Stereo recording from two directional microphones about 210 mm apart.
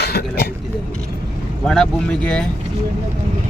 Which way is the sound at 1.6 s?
5° left (ahead or behind).